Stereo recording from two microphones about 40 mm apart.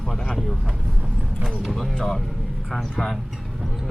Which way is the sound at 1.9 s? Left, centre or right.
Centre.